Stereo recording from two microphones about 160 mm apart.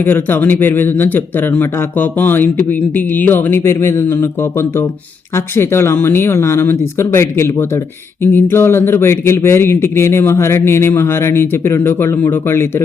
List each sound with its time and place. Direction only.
0.0 s speech: 10° left (ahead or behind)